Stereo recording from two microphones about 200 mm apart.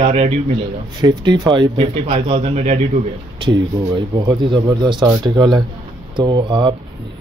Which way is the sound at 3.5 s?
25° right (ahead or behind).